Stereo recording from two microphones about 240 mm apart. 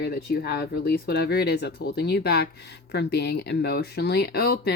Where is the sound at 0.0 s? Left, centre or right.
Left.